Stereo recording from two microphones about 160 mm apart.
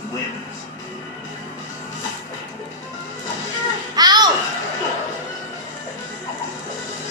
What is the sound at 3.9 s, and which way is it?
Children playing, 25° right (ahead or behind).